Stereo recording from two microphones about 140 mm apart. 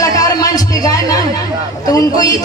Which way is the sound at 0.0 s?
25° left (ahead or behind).